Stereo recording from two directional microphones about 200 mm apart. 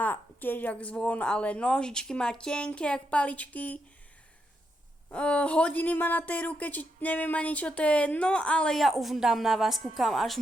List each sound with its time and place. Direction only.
0.0 s speech: 10° left (ahead or behind)
5.0 s speech: 5° left (ahead or behind)